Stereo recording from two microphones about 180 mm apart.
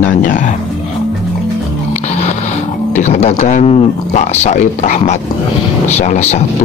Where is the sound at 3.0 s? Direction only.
40° left (ahead or behind).